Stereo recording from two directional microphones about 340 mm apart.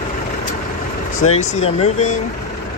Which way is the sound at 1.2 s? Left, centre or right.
Left.